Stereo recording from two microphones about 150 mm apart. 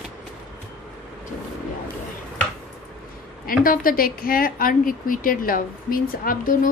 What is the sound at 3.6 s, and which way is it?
A woman's voice, 75° left (ahead or behind).